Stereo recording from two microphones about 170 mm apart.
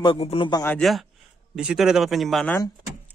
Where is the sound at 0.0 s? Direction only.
30° left (ahead or behind).